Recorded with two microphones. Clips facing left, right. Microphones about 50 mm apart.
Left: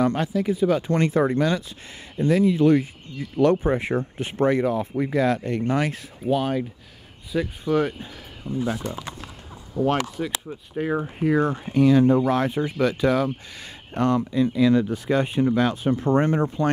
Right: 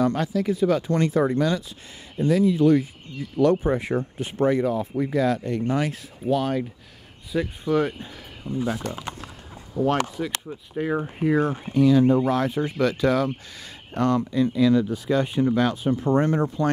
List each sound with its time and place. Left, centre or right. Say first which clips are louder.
0.0 s speech: even; left
0.8 s speech: left 1 dB; left
4.3 s speech: left 1 dB; left
4.9 s speech: even; left
6.2 s speech: even; centre
7.3 s speech: even; centre
11.7 s speech: left 1 dB; left
12.6 s speech: even; centre
13.6 s speech: even; left
14.1 s speech: even; centre
14.6 s speech: even; left
15.8 s speech: left 1 dB; left
16.2 s speech: left 1 dB; left